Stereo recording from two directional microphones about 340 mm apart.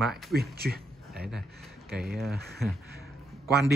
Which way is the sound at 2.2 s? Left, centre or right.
Centre.